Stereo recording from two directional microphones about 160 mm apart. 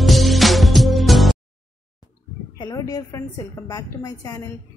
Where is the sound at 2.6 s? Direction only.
25° left (ahead or behind).